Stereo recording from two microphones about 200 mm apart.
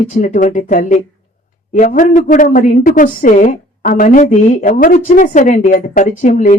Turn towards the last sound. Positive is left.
turn(degrees=40)  # may be behind; listen again after turning